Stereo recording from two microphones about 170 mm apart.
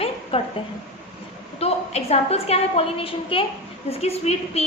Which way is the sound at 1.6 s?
40° left (ahead or behind).